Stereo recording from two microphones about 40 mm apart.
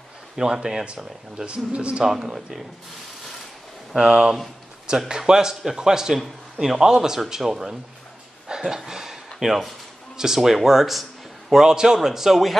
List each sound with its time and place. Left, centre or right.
0.4 s a man's voice: centre
1.4 s a man's voice: right
2.0 s a man's voice: centre
3.9 s a man's voice: centre
8.5 s a sound: centre
10.1 s a man's voice: centre